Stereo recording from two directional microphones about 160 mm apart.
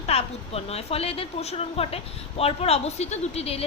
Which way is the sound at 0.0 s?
40° left (ahead or behind).